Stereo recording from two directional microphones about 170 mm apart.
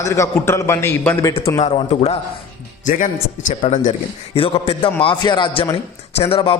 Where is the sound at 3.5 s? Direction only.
45° left (ahead or behind).